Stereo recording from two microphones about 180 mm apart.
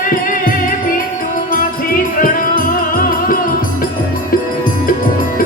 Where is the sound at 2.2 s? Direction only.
50° left (ahead or behind).